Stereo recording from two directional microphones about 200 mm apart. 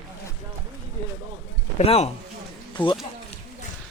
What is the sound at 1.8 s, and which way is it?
Speech, 30° left (ahead or behind).